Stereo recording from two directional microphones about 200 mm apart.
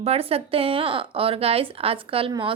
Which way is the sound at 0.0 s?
30° right (ahead or behind).